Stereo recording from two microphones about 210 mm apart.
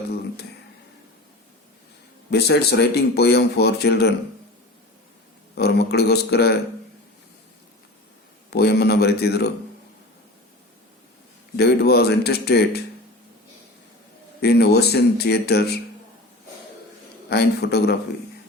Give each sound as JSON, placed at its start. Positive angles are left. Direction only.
{"t": 2.3, "sound": "speech", "side_deg": 50}
{"t": 5.5, "sound": "speech", "side_deg": 50}
{"t": 8.4, "sound": "speech", "side_deg": 50}
{"t": 11.5, "sound": "speech", "side_deg": 50}
{"t": 14.4, "sound": "speech", "side_deg": 50}
{"t": 17.2, "sound": "speech", "side_deg": 50}